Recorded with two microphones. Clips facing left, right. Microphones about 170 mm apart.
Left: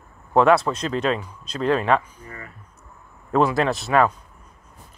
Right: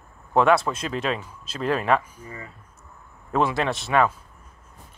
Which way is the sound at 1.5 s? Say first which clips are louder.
Left 4 dB; 35° left (ahead or behind).